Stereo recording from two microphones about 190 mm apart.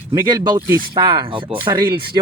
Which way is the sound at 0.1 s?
20° right (ahead or behind).